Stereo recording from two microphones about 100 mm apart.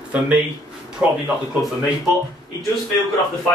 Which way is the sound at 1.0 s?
10° right (ahead or behind).